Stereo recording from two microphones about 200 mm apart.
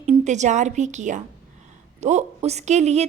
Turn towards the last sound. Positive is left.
turn(degrees=-35)  # may be behind; listen again after turning